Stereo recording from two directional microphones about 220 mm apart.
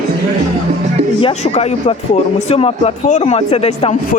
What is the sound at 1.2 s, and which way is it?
A man's voice, 25° left (ahead or behind).